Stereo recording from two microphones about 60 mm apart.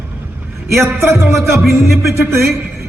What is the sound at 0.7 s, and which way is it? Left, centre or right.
A man's voice, right.